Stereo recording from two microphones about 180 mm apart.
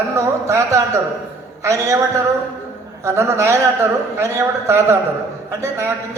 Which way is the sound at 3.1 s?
15° right (ahead or behind).